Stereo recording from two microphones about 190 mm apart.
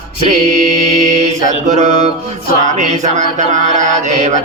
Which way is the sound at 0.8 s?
40° right (ahead or behind).